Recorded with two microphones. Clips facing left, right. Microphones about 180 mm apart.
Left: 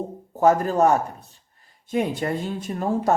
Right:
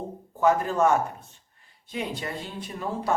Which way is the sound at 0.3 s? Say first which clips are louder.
Left 4 dB; 40° left (ahead or behind).